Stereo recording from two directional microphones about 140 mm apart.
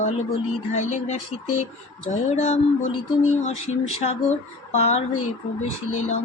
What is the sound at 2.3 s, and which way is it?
Speech, 55° left (ahead or behind).